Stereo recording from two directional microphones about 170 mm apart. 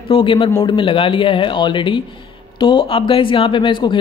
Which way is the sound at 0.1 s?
30° left (ahead or behind).